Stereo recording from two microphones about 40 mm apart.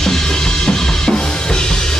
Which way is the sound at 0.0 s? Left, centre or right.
Centre.